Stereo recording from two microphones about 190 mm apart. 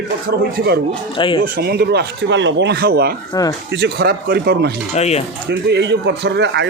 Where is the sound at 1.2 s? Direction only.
25° left (ahead or behind).